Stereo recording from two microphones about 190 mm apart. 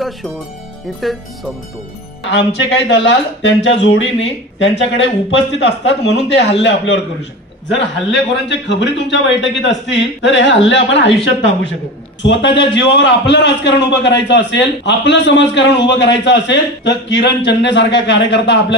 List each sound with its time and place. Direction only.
1.0 s speech: centre (ahead or behind)
2.3 s a man's voice: 65° left (ahead or behind)
12.2 s a man's voice: 70° left (ahead or behind)